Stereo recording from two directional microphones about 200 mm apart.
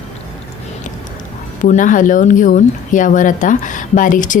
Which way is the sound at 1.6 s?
40° left (ahead or behind).